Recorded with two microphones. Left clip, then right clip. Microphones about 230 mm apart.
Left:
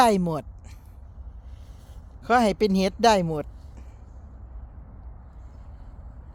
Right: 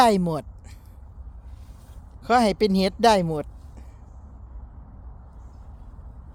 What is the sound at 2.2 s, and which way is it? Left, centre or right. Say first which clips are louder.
Speech: right 1 dB; centre.